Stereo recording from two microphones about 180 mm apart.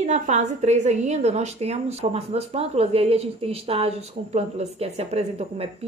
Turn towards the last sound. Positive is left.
turn(degrees=-35)  # may be behind; listen again after turning